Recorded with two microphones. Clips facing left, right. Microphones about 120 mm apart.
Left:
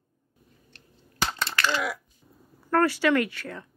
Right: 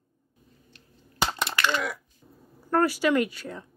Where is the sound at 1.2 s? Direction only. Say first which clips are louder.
Right 1 dB; 15° right (ahead or behind).